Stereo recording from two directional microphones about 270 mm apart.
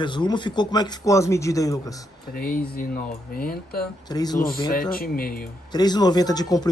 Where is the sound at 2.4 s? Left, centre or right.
Left.